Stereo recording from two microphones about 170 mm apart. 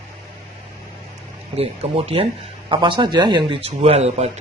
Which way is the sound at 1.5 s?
35° right (ahead or behind).